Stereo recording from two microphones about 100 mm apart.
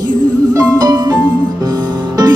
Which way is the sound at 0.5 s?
40° right (ahead or behind).